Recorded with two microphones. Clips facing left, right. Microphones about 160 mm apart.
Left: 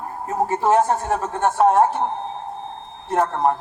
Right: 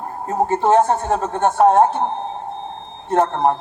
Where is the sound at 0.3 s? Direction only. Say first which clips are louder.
Right 3 dB; 30° right (ahead or behind).